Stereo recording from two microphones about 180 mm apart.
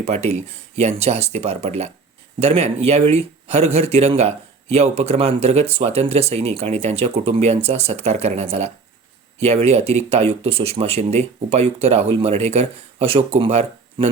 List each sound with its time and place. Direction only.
0.0 s speech: 35° right (ahead or behind)